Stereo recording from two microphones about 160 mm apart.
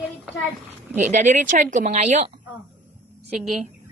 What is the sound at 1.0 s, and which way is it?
Speech, 50° right (ahead or behind).